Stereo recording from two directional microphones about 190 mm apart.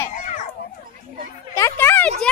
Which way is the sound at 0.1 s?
40° left (ahead or behind).